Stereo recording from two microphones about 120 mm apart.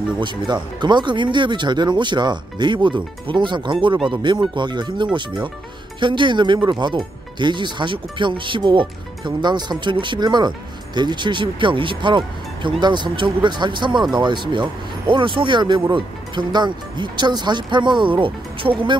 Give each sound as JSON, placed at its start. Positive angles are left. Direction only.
{"t": 0.2, "sound": "speech", "side_deg": -40}